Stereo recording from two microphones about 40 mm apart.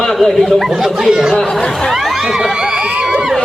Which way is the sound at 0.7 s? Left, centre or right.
Centre.